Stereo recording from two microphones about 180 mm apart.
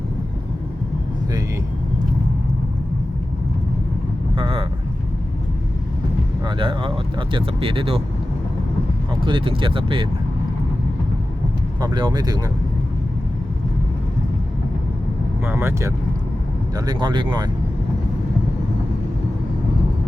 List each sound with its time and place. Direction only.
4.4 s vehicle: 30° right (ahead or behind)
6.4 s speech: 25° right (ahead or behind)
9.2 s speech: 30° right (ahead or behind)
11.8 s speech: 25° right (ahead or behind)
15.4 s speech: 15° right (ahead or behind)